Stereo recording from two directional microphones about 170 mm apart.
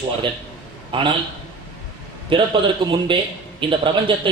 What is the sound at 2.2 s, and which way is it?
A man's voice, 30° right (ahead or behind).